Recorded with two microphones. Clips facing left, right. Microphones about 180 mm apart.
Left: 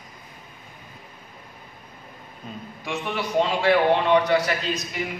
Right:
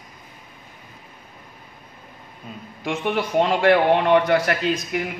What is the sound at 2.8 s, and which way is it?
A man's voice, 55° right (ahead or behind).